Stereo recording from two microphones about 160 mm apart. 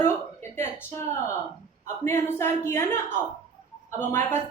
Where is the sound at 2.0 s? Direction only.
15° left (ahead or behind).